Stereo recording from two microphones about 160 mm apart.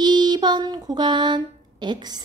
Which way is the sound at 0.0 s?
25° right (ahead or behind).